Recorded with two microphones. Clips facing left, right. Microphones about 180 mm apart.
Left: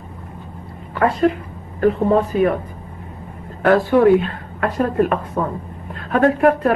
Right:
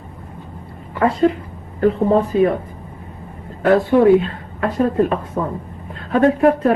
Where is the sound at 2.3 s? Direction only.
30° right (ahead or behind).